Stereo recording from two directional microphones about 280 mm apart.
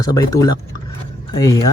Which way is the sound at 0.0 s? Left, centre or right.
Centre.